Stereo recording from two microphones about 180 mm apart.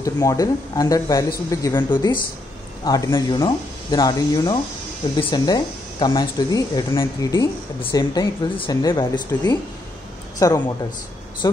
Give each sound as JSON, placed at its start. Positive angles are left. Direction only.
{"t": 0.0, "sound": "speech", "side_deg": 20}